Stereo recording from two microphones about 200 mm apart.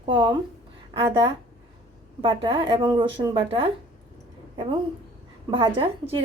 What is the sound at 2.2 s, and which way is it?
A woman's voice, 25° right (ahead or behind).